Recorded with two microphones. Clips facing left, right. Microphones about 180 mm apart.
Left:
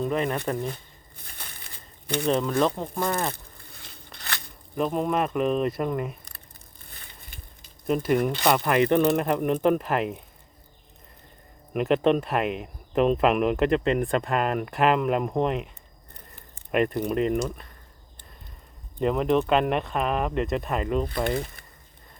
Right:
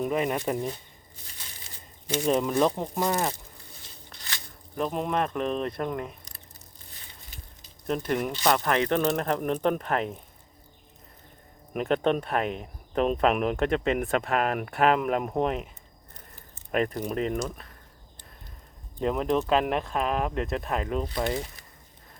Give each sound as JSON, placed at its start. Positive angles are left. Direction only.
{"t": 0.0, "sound": "speech", "side_deg": -10}
{"t": 1.1, "sound": "crumpling", "side_deg": 55}
{"t": 2.3, "sound": "speech", "side_deg": -10}
{"t": 3.3, "sound": "a sound", "side_deg": 60}
{"t": 4.8, "sound": "speech", "side_deg": 0}
{"t": 6.8, "sound": "crushing", "side_deg": 55}
{"t": 7.9, "sound": "speech", "side_deg": 5}
{"t": 11.7, "sound": "speech", "side_deg": 0}
{"t": 16.7, "sound": "speech", "side_deg": 0}
{"t": 18.9, "sound": "speech", "side_deg": 0}